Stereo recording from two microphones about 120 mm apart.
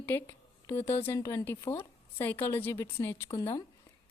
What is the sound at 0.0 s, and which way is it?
A woman's voice, 15° left (ahead or behind).